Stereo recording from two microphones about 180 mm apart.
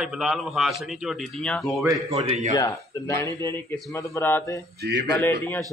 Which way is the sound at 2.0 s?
35° right (ahead or behind).